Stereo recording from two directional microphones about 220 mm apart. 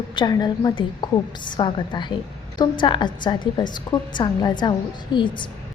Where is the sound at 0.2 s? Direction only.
20° left (ahead or behind).